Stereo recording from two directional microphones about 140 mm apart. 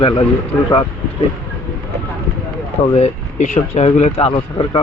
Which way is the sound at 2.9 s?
55° left (ahead or behind).